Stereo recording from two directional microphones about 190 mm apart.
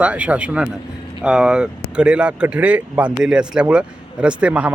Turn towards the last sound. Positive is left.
turn(degrees=-5)  # may be behind; listen again after turning